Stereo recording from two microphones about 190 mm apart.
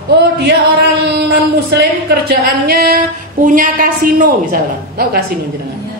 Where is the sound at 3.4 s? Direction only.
45° right (ahead or behind).